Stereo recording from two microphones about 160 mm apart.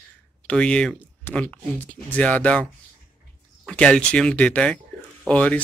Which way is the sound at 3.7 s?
5° left (ahead or behind).